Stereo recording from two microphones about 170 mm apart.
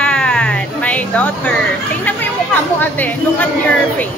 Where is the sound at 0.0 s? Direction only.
5° left (ahead or behind).